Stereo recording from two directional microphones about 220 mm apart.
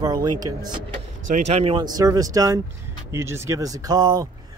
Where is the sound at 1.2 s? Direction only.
35° right (ahead or behind); by 4.2 s 15° right (ahead or behind).